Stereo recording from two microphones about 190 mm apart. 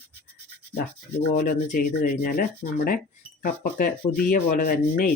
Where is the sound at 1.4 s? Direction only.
50° left (ahead or behind).